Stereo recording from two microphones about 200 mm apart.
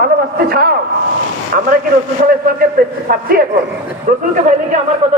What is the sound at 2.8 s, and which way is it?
Speech, 50° right (ahead or behind).